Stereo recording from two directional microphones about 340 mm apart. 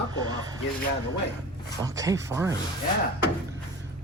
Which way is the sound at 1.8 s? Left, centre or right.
Centre.